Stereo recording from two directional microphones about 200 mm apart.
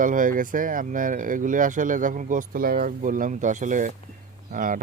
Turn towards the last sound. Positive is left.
turn(degrees=-40)  # may be behind; listen again after turning